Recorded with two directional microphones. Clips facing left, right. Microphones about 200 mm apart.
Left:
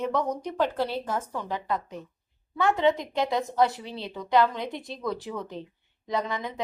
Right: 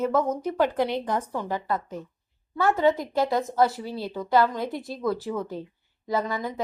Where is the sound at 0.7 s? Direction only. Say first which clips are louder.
Right 3 dB; 15° right (ahead or behind).